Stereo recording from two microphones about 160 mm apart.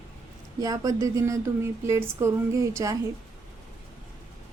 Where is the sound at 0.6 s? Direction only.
20° right (ahead or behind).